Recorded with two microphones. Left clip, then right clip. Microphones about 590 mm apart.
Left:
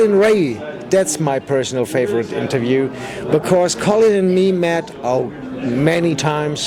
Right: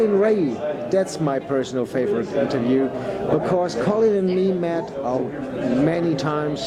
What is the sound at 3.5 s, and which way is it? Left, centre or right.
A man's voice, left.